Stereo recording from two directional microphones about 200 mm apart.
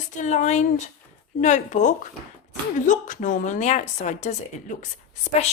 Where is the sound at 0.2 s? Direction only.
35° left (ahead or behind).